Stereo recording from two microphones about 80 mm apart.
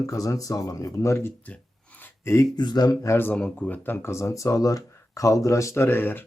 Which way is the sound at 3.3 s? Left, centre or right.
Centre.